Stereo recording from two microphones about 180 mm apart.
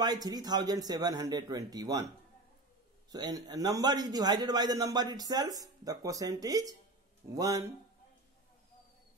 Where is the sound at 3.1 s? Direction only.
20° right (ahead or behind).